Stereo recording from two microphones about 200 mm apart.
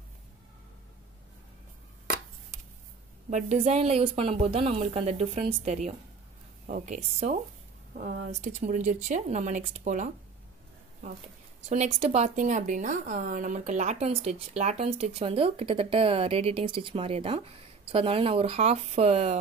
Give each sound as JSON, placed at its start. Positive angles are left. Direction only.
{"t": 3.3, "sound": "a woman's voice", "side_deg": -35}
{"t": 11.7, "sound": "a woman's voice", "side_deg": -30}